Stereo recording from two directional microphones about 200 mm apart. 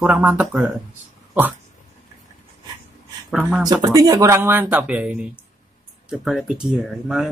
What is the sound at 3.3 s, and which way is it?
Speech, centre (ahead or behind).